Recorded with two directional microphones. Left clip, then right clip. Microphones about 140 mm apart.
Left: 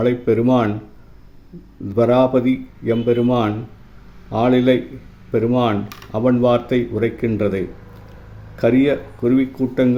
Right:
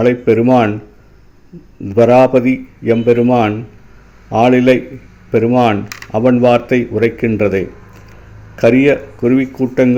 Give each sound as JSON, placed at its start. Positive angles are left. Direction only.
{"t": 0.0, "sound": "speech", "side_deg": -20}
{"t": 1.9, "sound": "speech", "side_deg": -25}
{"t": 3.2, "sound": "speech", "side_deg": -5}
{"t": 4.3, "sound": "speech", "side_deg": -20}
{"t": 5.5, "sound": "speech", "side_deg": -10}
{"t": 6.2, "sound": "speech", "side_deg": -25}